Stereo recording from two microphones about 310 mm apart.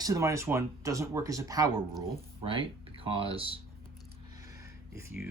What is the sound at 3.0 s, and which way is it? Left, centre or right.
Speech, centre.